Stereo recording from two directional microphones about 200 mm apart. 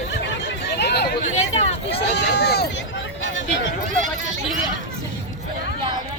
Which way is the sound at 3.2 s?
70° left (ahead or behind).